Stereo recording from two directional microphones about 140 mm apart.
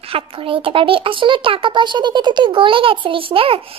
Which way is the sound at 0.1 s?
40° right (ahead or behind).